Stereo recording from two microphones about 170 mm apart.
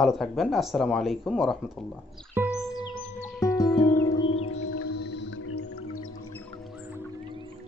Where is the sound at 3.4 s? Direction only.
20° left (ahead or behind).